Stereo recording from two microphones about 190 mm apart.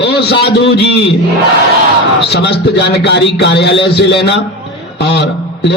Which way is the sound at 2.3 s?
65° left (ahead or behind).